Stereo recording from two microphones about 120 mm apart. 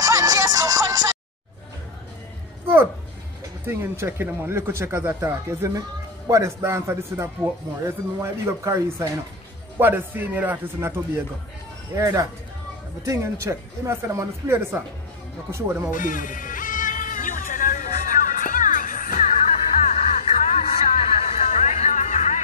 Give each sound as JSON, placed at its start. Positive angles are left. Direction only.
{"t": 0.0, "sound": "music", "side_deg": -30}
{"t": 3.6, "sound": "a man's voice", "side_deg": -20}
{"t": 15.9, "sound": "music", "side_deg": 90}
{"t": 19.8, "sound": "music", "side_deg": 70}